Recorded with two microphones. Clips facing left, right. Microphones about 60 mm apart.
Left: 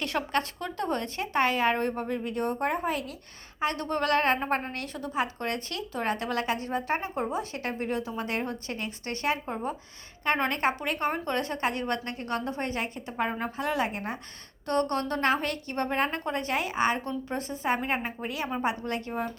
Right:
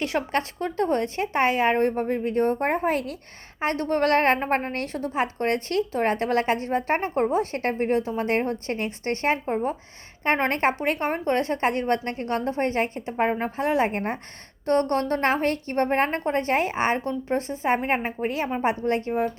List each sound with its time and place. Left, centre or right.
0.0 s a woman's voice: right
3.6 s a woman's voice: right
13.9 s a woman's voice: right